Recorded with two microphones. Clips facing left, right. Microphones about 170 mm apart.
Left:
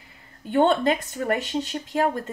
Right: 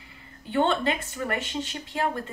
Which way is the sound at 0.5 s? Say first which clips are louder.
Left 4 dB; 45° left (ahead or behind).